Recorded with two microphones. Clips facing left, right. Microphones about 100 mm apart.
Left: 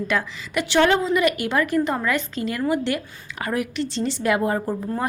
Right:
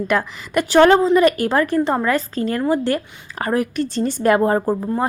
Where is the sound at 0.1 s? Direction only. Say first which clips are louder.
Right 5 dB; 45° right (ahead or behind).